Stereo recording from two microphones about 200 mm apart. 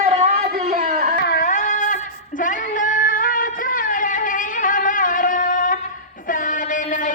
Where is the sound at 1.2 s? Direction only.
45° left (ahead or behind).